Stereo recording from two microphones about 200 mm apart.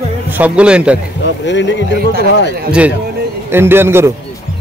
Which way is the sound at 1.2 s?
60° left (ahead or behind).